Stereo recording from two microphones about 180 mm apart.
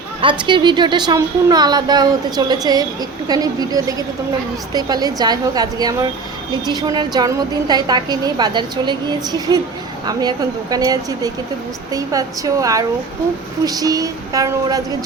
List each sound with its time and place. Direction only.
0.2 s a woman's voice: 25° right (ahead or behind)